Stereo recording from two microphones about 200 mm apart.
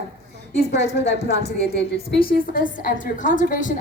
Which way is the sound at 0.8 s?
30° left (ahead or behind).